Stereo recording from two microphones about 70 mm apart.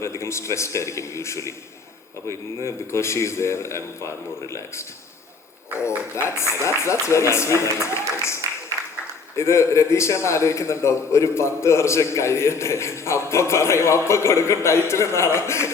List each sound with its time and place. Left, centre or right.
0.0 s a man's voice: left
6.1 s a man's voice: left